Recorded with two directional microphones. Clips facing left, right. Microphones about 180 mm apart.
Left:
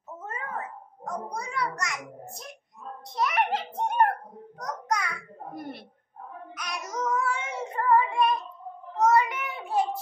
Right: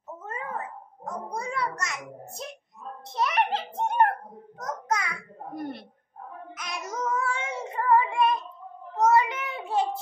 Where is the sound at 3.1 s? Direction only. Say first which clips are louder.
Even; 25° right (ahead or behind).